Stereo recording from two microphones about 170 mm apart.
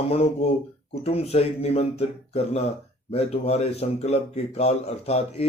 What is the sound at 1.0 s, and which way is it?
Speech, 35° left (ahead or behind).